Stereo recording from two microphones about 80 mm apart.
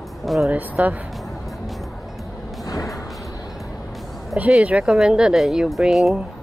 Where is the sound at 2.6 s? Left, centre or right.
Left.